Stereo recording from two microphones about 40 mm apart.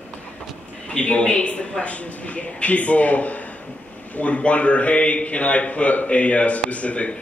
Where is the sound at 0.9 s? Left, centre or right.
Left.